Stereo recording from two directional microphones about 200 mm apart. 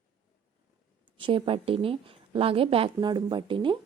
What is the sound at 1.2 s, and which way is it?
A woman's voice, 25° right (ahead or behind).